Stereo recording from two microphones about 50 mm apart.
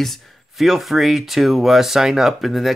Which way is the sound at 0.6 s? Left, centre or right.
Centre.